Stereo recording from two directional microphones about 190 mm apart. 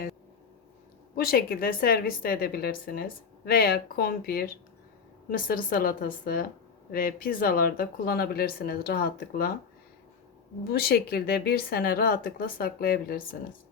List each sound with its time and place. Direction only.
1.1 s speech: 50° left (ahead or behind)
10.7 s speech: 55° left (ahead or behind)